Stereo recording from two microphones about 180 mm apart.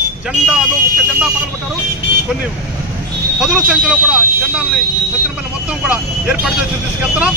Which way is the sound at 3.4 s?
5° right (ahead or behind).